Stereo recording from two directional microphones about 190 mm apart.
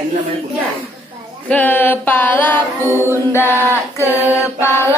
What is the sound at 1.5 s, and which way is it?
Female singing, 10° left (ahead or behind).